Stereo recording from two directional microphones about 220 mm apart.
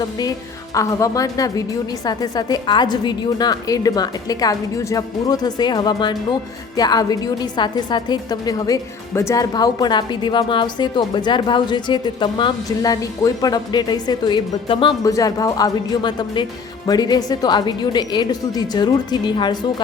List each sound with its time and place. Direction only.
0.2 s a woman's voice: 15° left (ahead or behind)